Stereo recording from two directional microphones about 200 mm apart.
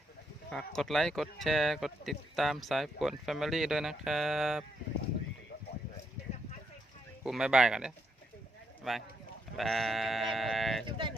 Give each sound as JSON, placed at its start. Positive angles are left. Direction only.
{"t": 0.5, "sound": "speech", "side_deg": 0}
{"t": 7.3, "sound": "speech", "side_deg": 0}
{"t": 10.8, "sound": "speech", "side_deg": -25}